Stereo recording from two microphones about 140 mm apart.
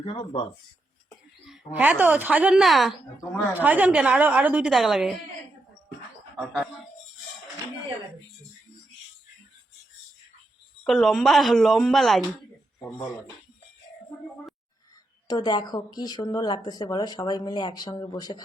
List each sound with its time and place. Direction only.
0.0 s speech: 40° left (ahead or behind)
1.8 s a woman's voice: 10° right (ahead or behind)
3.5 s a woman's voice: 10° right (ahead or behind)
6.4 s speech: centre (ahead or behind)
10.8 s a woman's voice: centre (ahead or behind)
15.3 s speech: 30° left (ahead or behind)